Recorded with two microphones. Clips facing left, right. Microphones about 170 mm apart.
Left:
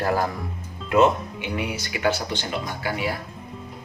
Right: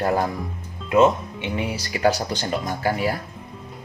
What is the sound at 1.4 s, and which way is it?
Speech, 30° right (ahead or behind).